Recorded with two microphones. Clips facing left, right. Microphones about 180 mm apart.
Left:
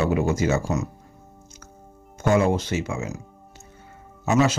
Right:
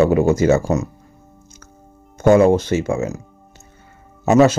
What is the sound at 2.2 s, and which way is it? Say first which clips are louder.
Speech: right 8 dB; 45° right (ahead or behind).